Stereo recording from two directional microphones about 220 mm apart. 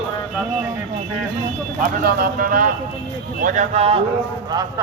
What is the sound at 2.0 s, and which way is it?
Speech, 40° right (ahead or behind).